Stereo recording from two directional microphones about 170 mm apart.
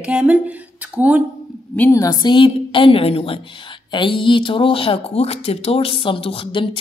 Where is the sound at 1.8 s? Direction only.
15° left (ahead or behind).